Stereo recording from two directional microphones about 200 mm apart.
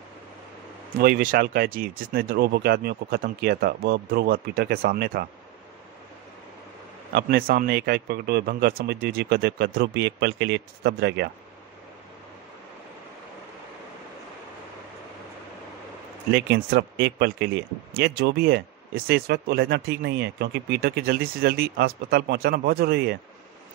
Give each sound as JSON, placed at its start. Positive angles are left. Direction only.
{"t": 0.9, "sound": "speech", "side_deg": -50}
{"t": 7.1, "sound": "speech", "side_deg": -50}
{"t": 16.3, "sound": "speech", "side_deg": -55}